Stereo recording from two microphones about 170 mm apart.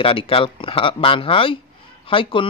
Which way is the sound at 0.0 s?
30° left (ahead or behind).